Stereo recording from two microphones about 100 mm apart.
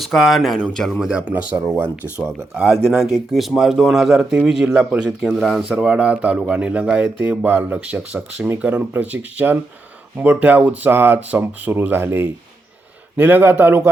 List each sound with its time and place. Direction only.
0.0 s speech: centre (ahead or behind)
2.6 s a man's voice: centre (ahead or behind); by 13.9 s 20° right (ahead or behind)